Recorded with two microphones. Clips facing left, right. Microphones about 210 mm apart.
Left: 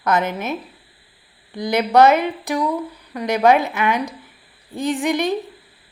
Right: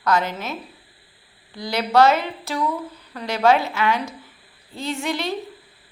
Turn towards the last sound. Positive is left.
turn(degrees=15)  # may be behind; listen again after turning